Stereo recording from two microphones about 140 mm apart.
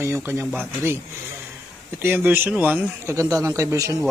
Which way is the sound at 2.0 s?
15° right (ahead or behind).